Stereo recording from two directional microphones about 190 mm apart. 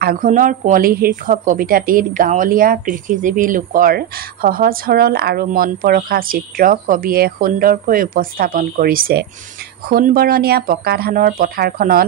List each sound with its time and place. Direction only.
0.0 s a woman's voice: 45° right (ahead or behind)